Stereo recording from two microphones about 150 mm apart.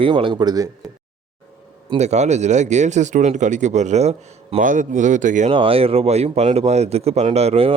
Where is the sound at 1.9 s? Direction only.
50° right (ahead or behind).